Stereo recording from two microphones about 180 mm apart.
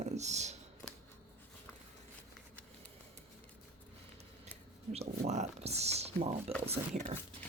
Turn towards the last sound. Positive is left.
turn(degrees=-40)  # may be behind; listen again after turning